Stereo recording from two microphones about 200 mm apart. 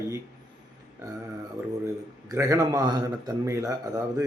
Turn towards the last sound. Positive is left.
turn(degrees=-15)  # may be behind; listen again after turning